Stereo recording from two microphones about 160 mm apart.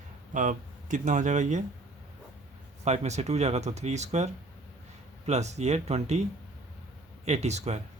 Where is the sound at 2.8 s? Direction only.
45° right (ahead or behind).